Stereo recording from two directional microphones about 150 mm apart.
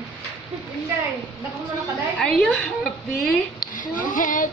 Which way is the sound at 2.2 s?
5° left (ahead or behind).